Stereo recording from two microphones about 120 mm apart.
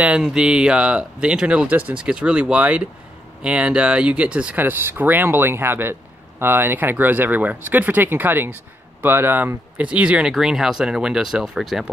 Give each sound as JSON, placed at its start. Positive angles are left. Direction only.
{"t": 0.0, "sound": "speech", "side_deg": -5}